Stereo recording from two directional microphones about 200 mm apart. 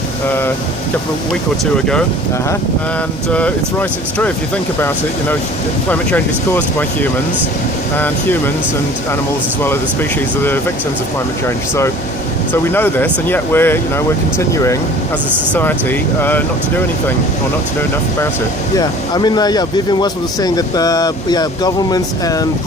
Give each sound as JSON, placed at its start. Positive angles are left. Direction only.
{"t": 3.3, "sound": "speech", "side_deg": 5}
{"t": 5.9, "sound": "speech", "side_deg": 10}
{"t": 12.7, "sound": "speech", "side_deg": 10}
{"t": 18.8, "sound": "speech", "side_deg": 20}